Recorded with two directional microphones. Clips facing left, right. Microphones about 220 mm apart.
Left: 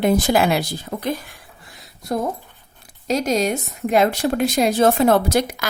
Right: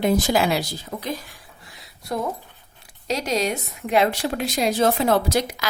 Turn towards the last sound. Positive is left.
turn(degrees=50)  # may be behind; listen again after turning